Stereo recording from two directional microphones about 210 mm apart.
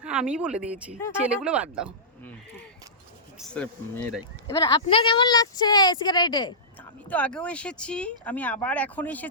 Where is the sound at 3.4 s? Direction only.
5° left (ahead or behind).